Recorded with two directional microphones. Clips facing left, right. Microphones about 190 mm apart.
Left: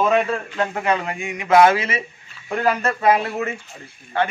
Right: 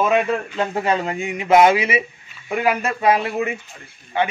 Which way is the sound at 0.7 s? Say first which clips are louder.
Right 4 dB; 30° right (ahead or behind).